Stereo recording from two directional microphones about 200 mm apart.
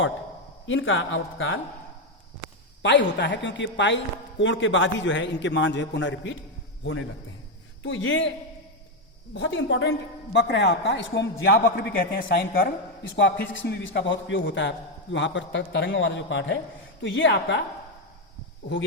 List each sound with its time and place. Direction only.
0.7 s speech: 75° left (ahead or behind)
2.8 s a man's voice: 65° left (ahead or behind)
7.8 s speech: 70° left (ahead or behind)
9.3 s a man's voice: 65° left (ahead or behind)